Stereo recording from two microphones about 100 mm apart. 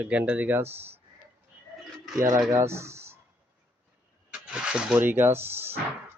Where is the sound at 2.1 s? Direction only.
30° right (ahead or behind).